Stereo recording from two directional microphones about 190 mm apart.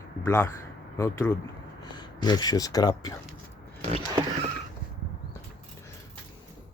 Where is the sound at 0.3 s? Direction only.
10° left (ahead or behind).